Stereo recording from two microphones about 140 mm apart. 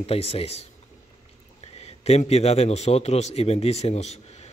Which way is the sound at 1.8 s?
50° left (ahead or behind).